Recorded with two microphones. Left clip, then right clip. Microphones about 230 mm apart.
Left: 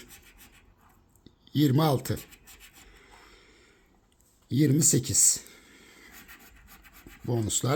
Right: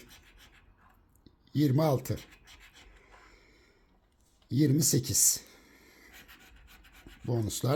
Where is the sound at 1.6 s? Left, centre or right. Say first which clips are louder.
Left 3 dB; centre.